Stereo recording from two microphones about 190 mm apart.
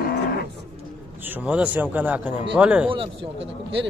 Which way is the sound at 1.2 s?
10° right (ahead or behind).